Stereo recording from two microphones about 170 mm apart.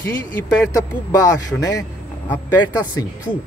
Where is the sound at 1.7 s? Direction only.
20° left (ahead or behind).